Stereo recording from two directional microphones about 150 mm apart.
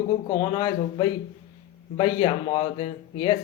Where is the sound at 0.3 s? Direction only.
30° left (ahead or behind).